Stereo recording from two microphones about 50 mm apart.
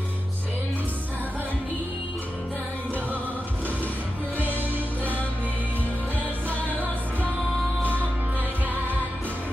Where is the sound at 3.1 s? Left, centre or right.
Right.